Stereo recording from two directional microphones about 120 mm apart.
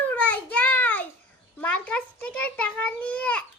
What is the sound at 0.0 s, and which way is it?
Child singing, 15° left (ahead or behind).